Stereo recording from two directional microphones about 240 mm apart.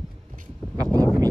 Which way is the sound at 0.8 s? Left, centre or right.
Centre.